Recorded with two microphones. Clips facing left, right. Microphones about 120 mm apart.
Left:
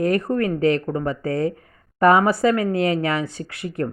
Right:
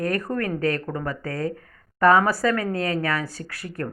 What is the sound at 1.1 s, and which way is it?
Speech, 25° left (ahead or behind).